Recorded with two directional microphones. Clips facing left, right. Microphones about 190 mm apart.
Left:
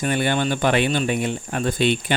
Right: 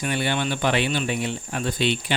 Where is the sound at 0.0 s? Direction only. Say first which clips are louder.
Left 4 dB; 45° left (ahead or behind).